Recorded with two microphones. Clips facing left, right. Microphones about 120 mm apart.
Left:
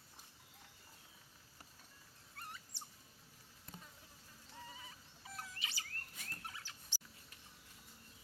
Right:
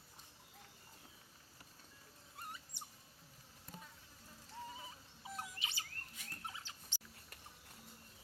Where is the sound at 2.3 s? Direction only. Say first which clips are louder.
Right 1 dB; 15° right (ahead or behind).